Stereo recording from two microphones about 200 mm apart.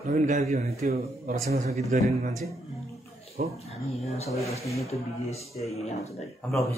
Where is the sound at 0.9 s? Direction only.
50° right (ahead or behind).